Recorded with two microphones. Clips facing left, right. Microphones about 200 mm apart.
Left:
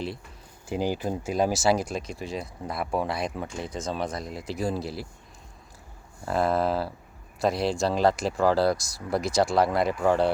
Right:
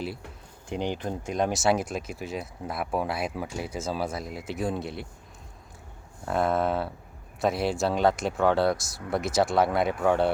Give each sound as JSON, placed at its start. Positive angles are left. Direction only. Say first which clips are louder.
{"t": 0.7, "sound": "speech", "louder": "left 3 dB", "side_deg": 5}
{"t": 6.2, "sound": "speech", "louder": "left 1 dB", "side_deg": 0}